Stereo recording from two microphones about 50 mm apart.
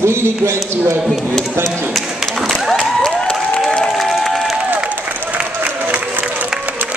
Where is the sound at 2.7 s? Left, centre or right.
Centre.